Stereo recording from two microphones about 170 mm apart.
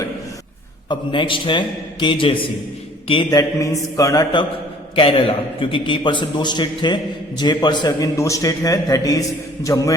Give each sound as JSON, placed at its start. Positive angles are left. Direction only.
{"t": 0.9, "sound": "a man's voice", "side_deg": 30}